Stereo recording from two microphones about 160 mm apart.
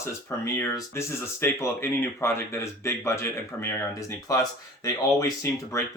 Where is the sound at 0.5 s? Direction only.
15° left (ahead or behind).